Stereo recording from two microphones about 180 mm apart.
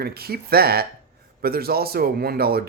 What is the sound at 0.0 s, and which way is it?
Speech, 60° right (ahead or behind).